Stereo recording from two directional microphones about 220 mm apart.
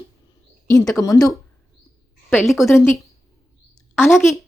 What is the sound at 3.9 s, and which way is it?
Speech, 10° left (ahead or behind).